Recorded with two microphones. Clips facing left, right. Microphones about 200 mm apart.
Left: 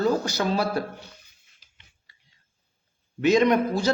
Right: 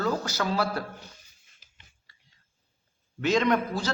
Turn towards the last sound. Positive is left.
turn(degrees=15)  # may be behind; listen again after turning